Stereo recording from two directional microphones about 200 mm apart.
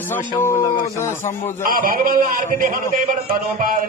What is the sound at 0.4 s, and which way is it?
Speech, 15° left (ahead or behind).